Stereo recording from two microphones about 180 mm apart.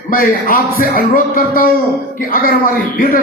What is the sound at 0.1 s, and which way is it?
A man's voice, 50° left (ahead or behind).